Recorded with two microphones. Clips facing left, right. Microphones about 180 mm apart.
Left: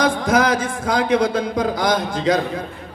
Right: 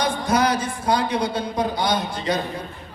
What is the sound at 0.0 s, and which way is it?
A woman's voice, 90° left.